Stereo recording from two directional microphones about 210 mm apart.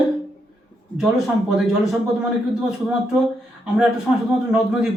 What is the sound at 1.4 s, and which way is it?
Speech, centre (ahead or behind).